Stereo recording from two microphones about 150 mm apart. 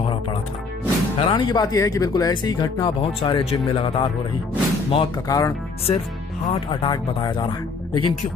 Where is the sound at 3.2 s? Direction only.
35° left (ahead or behind).